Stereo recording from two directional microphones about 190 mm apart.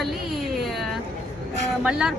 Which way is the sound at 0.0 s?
Centre (ahead or behind).